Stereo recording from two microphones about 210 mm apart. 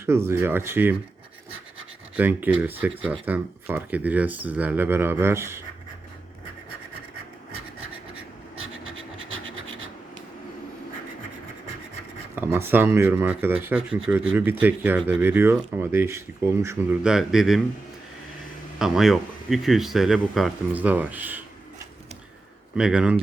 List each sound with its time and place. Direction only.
0.0 s speech: 10° right (ahead or behind)
2.1 s speech: 10° right (ahead or behind)
8.5 s scratch: 75° right (ahead or behind)
12.4 s speech: 10° right (ahead or behind)
18.8 s speech: centre (ahead or behind)
22.7 s speech: 5° right (ahead or behind)